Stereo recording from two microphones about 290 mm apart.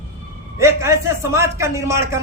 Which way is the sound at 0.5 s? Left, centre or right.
Centre.